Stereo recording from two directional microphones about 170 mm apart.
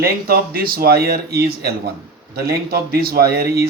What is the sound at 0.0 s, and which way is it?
Speech, 60° right (ahead or behind).